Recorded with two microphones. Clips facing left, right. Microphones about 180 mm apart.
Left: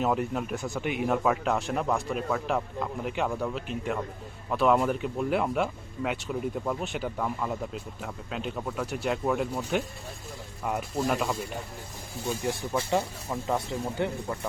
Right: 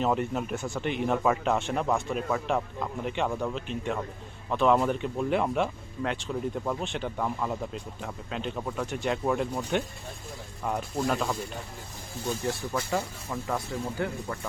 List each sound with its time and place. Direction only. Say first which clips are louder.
0.0 s speech: even; centre (ahead or behind)
12.7 s speech: left 2 dB; 20° left (ahead or behind)